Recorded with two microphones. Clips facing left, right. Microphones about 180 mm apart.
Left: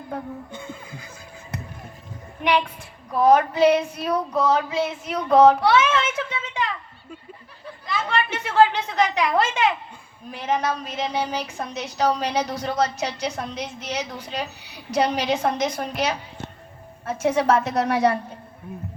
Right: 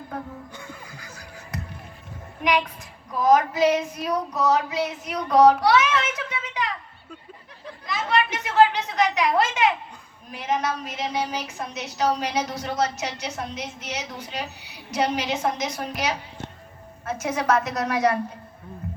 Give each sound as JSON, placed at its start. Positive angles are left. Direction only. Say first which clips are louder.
{"t": 0.5, "sound": "music", "louder": "left 4 dB", "side_deg": 25}
{"t": 3.2, "sound": "female singing", "louder": "left 2 dB", "side_deg": 30}
{"t": 7.9, "sound": "a sound", "louder": "right 1 dB", "side_deg": 30}
{"t": 10.3, "sound": "a woman's voice", "louder": "left 2 dB", "side_deg": 30}